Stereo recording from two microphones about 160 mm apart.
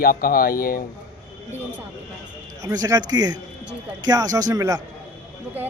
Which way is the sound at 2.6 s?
20° right (ahead or behind).